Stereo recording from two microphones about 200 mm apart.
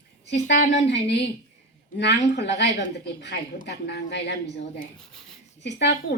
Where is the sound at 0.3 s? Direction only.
55° left (ahead or behind).